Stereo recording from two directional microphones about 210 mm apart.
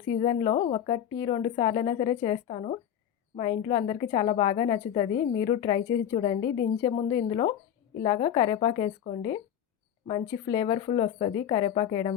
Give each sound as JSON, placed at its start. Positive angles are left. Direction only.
{"t": 0.2, "sound": "a woman's voice", "side_deg": 25}